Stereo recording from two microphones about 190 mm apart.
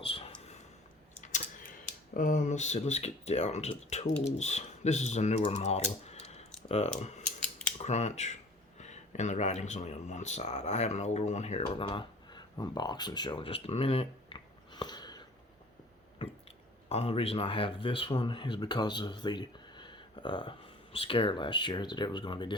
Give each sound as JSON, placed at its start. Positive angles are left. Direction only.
{"t": 0.0, "sound": "a sound", "side_deg": 30}
{"t": 2.1, "sound": "speech", "side_deg": 45}
{"t": 16.2, "sound": "chewing", "side_deg": 25}
{"t": 16.9, "sound": "speech", "side_deg": 30}